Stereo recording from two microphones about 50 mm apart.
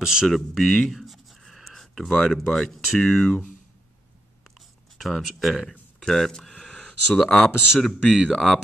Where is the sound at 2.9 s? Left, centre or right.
Centre.